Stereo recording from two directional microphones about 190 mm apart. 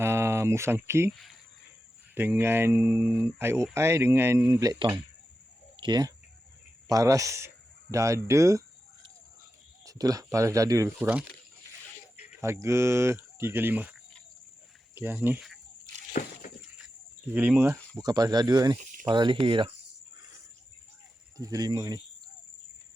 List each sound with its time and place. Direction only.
0.0 s a sound: 15° right (ahead or behind)
2.1 s speech: 10° right (ahead or behind)
9.8 s speech: 20° right (ahead or behind)
10.8 s speech: 5° right (ahead or behind)
12.4 s speech: 15° right (ahead or behind)
14.9 s speech: 10° right (ahead or behind)
16.2 s a sound: 45° left (ahead or behind)
17.3 s speech: 10° right (ahead or behind); by 19.7 s 25° right (ahead or behind)
21.3 s speech: 20° right (ahead or behind)